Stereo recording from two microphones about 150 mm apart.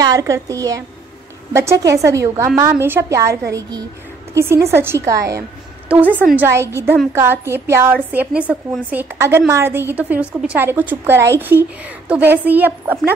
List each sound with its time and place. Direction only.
0.0 s a woman's voice: 20° right (ahead or behind)
5.9 s a woman's voice: 10° right (ahead or behind)